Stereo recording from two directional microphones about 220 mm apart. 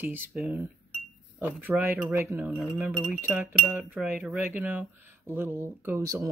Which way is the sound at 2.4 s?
Centre (ahead or behind).